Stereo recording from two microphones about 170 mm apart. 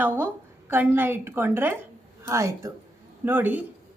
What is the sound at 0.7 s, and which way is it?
A woman's voice, 10° right (ahead or behind).